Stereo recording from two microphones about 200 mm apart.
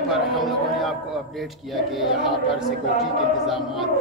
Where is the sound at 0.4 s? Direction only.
Centre (ahead or behind).